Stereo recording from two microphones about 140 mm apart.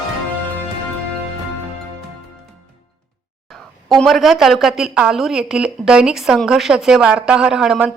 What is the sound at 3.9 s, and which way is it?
A woman's voice, centre (ahead or behind).